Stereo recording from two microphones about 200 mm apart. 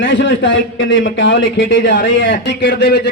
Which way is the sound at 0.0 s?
65° left (ahead or behind).